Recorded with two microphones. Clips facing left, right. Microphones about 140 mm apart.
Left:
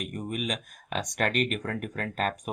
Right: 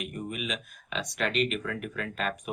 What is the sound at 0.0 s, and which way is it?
Speech, 45° left (ahead or behind).